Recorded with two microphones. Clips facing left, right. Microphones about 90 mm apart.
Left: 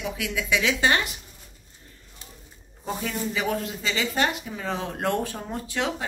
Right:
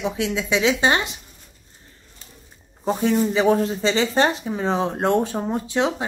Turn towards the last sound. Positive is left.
turn(degrees=-25)  # may be behind; listen again after turning